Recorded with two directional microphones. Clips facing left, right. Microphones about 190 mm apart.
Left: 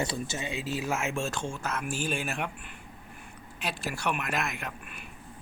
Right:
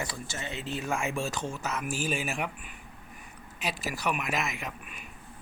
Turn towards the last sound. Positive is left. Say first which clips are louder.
# even
turn(degrees=0)  # may be behind; listen again after turning